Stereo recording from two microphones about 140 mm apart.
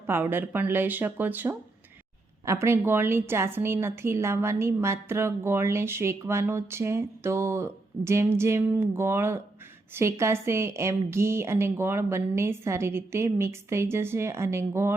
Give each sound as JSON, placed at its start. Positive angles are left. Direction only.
{"t": 0.1, "sound": "a woman's voice", "side_deg": -15}